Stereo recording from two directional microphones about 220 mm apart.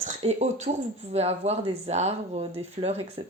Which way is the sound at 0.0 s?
30° right (ahead or behind).